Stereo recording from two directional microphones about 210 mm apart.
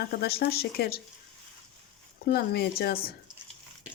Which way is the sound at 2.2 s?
50° left (ahead or behind).